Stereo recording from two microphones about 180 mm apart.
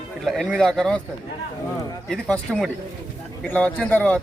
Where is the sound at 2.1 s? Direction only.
5° left (ahead or behind).